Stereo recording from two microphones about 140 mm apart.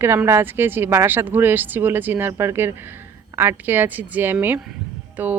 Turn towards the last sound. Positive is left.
turn(degrees=-10)  # may be behind; listen again after turning